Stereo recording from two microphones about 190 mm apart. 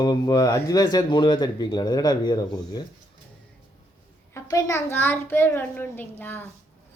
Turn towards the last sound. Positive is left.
turn(degrees=10)  # may be behind; listen again after turning